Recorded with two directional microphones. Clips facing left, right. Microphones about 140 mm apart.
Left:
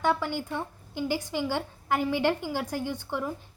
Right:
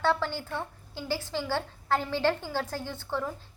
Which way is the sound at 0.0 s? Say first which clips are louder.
Left 1 dB; 15° left (ahead or behind).